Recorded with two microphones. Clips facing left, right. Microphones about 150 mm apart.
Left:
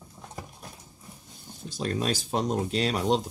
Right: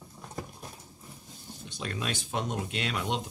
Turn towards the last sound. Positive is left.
turn(degrees=35)  # may be behind; listen again after turning